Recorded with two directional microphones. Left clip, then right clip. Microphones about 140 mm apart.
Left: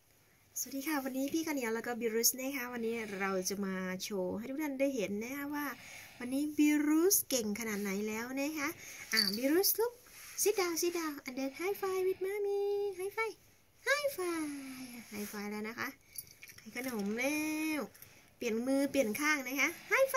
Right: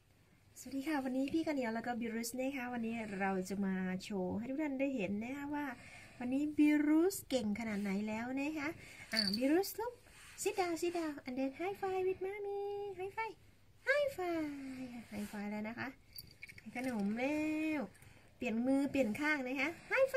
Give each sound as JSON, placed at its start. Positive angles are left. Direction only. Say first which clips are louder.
{"t": 0.7, "sound": "a woman's voice", "louder": "left 1 dB", "side_deg": -25}
{"t": 12.4, "sound": "child singing", "louder": "left 8 dB", "side_deg": 35}
{"t": 12.9, "sound": "a woman's voice", "louder": "left 4 dB", "side_deg": -25}